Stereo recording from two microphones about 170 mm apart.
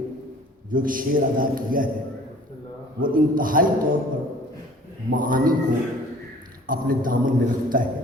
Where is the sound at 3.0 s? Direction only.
55° right (ahead or behind).